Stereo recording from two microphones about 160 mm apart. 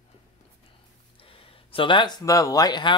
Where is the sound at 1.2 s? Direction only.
35° left (ahead or behind).